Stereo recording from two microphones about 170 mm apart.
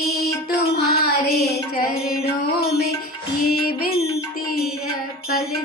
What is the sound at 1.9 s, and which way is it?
Music, 65° left (ahead or behind).